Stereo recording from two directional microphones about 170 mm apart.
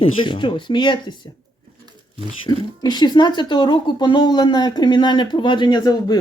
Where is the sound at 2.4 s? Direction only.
25° left (ahead or behind).